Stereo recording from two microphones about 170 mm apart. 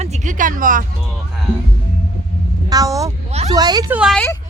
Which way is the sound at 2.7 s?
20° right (ahead or behind).